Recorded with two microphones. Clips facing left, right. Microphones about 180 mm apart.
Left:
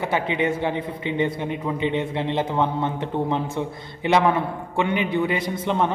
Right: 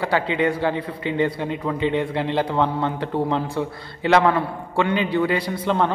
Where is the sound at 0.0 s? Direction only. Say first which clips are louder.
Right 2 dB; 20° left (ahead or behind).